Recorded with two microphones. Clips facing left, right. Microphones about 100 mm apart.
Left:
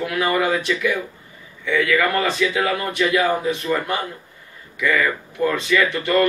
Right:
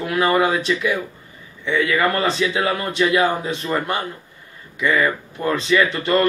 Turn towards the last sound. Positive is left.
turn(degrees=-25)  # may be behind; listen again after turning